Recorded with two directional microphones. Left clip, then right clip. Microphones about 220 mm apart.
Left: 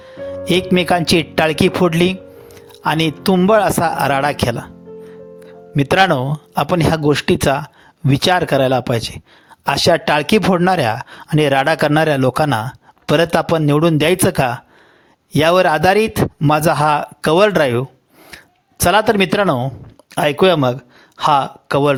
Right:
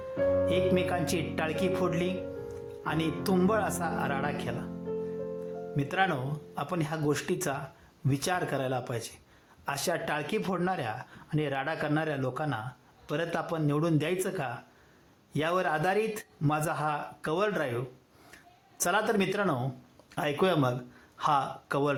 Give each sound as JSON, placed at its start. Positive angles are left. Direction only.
{"t": 0.2, "sound": "music", "side_deg": 0}
{"t": 0.7, "sound": "speech", "side_deg": 45}
{"t": 5.7, "sound": "speech", "side_deg": 45}